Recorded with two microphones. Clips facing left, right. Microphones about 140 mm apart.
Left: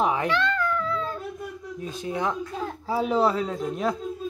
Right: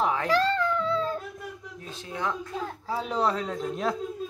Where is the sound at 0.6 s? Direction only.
25° right (ahead or behind).